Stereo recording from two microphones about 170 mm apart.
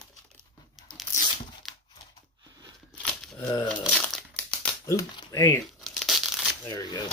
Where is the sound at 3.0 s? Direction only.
5° left (ahead or behind).